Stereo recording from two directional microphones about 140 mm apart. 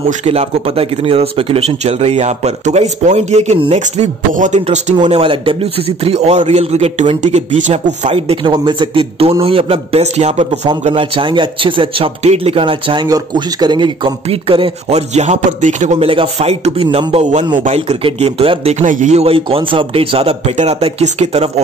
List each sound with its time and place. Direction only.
0.2 s a man's voice: 45° right (ahead or behind); by 4.6 s 60° right (ahead or behind)
4.6 s speech: 50° right (ahead or behind)
8.1 s speech: 35° right (ahead or behind)
10.9 s speech: 40° right (ahead or behind); by 16.1 s 60° right (ahead or behind)
16.1 s speech: 45° right (ahead or behind)
17.2 s a man's voice: 55° right (ahead or behind)
17.7 s speech: 45° right (ahead or behind)
18.9 s speech: 60° right (ahead or behind)